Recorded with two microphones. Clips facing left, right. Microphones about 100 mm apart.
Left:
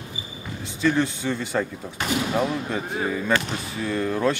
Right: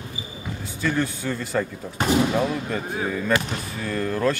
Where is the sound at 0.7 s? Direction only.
Centre (ahead or behind).